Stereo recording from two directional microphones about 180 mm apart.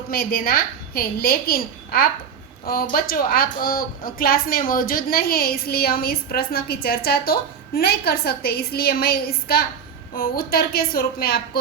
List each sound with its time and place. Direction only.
0.1 s a woman's voice: 55° left (ahead or behind)